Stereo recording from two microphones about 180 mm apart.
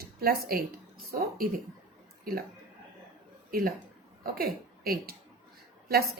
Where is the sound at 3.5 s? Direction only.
55° right (ahead or behind).